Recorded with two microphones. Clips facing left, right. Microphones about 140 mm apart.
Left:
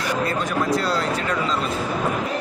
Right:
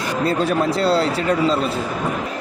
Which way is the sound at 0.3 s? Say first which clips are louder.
Right 4 dB; 30° right (ahead or behind).